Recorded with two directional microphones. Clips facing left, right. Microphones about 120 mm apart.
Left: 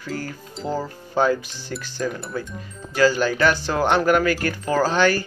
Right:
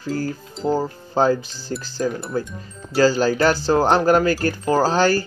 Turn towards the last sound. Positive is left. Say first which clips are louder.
# right 2 dB
turn(degrees=-35)  # may be behind; listen again after turning